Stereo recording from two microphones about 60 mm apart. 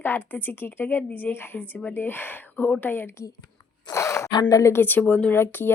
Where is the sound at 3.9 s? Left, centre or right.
Left.